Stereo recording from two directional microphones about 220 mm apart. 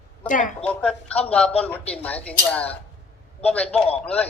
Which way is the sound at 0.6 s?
5° left (ahead or behind).